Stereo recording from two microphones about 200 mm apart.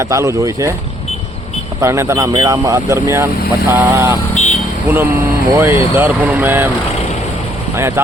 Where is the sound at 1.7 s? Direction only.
15° right (ahead or behind).